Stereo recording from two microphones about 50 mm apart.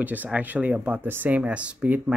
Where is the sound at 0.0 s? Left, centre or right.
Right.